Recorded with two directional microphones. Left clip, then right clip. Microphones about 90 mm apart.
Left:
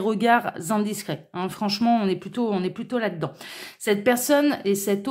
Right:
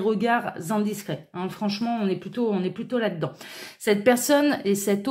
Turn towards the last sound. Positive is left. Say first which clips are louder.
# even
turn(degrees=15)  # may be behind; listen again after turning